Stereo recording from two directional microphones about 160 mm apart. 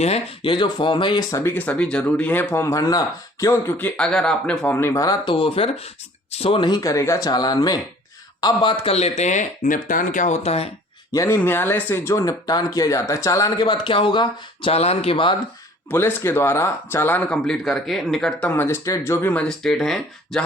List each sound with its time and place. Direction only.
0.0 s speech: 35° left (ahead or behind)
1.5 s speech: 10° left (ahead or behind); by 10.7 s 40° left (ahead or behind)
11.1 s speech: 20° left (ahead or behind)
15.9 s speech: 15° left (ahead or behind)